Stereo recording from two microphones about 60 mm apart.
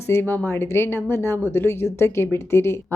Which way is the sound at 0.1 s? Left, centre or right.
Left.